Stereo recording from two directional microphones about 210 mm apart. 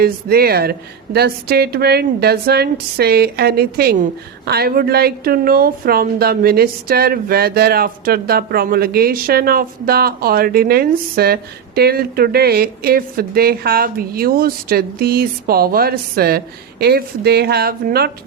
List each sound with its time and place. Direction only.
0.0 s a woman's voice: 45° right (ahead or behind)